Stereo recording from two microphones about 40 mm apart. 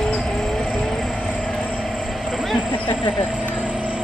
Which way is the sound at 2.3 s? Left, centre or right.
Centre.